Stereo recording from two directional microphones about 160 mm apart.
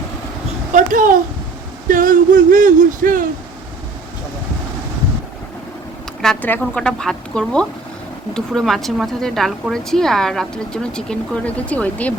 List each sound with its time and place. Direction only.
0.7 s a child's voice: 55° right (ahead or behind)
1.9 s a sound: 55° right (ahead or behind)
6.2 s speech: 5° left (ahead or behind)